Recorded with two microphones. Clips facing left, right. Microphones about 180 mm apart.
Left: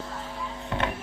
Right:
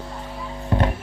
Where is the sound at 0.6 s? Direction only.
35° right (ahead or behind).